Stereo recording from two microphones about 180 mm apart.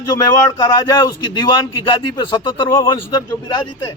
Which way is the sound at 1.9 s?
25° left (ahead or behind).